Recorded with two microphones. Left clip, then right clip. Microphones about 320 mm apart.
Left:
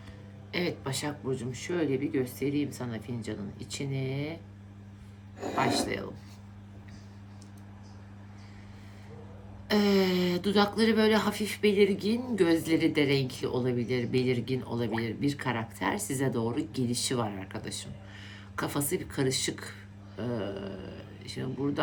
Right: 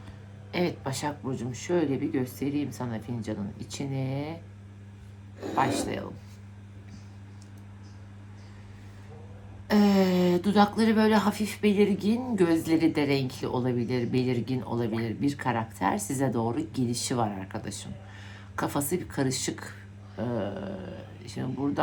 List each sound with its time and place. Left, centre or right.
0.5 s speech: centre
5.5 s speech: centre
9.6 s speech: centre